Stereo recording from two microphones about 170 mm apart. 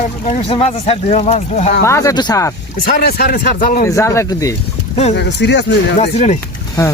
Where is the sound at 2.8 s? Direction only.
65° left (ahead or behind).